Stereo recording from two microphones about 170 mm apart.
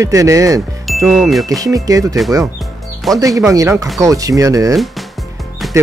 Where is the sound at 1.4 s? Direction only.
20° right (ahead or behind).